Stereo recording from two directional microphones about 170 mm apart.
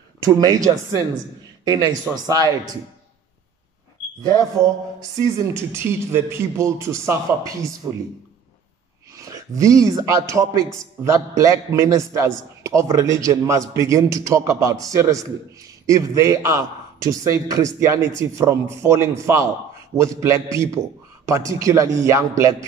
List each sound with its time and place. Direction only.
0.2 s a man's voice: 20° right (ahead or behind)
1.6 s a man's voice: 20° right (ahead or behind)
4.3 s a man's voice: 20° right (ahead or behind)
9.1 s a man's voice: 20° right (ahead or behind)